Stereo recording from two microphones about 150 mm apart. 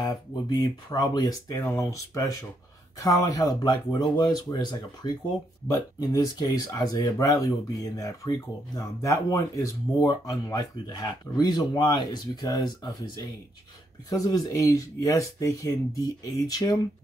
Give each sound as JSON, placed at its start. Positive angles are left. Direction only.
{"t": 0.0, "sound": "speech", "side_deg": 25}